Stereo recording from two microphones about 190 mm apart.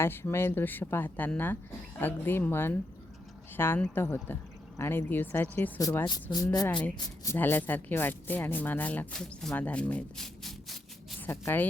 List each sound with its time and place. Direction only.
0.0 s a woman's voice: 10° left (ahead or behind)